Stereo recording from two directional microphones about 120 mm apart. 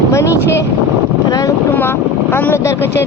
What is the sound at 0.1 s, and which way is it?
Speech, 25° left (ahead or behind).